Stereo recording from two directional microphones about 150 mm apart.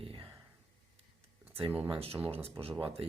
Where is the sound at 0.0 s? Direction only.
35° right (ahead or behind).